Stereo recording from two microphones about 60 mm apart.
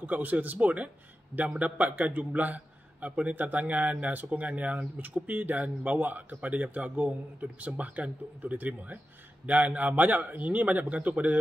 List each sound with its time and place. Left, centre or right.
0.0 s a man's voice: right